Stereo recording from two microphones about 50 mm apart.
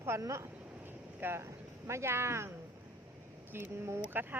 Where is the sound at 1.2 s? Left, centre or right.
Right.